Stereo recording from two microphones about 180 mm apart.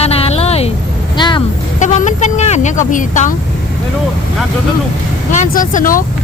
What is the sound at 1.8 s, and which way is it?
Speech, 40° left (ahead or behind).